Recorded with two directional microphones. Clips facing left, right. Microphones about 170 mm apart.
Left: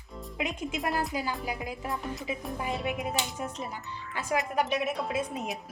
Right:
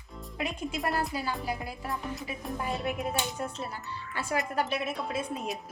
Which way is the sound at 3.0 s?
15° left (ahead or behind).